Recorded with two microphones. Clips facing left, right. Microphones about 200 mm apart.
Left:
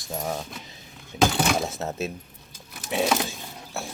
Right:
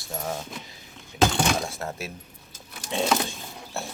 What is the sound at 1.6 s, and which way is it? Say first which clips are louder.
Speech: left 4 dB; 20° left (ahead or behind).